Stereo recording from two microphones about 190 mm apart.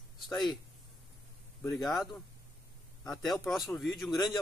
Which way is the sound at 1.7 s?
Centre (ahead or behind).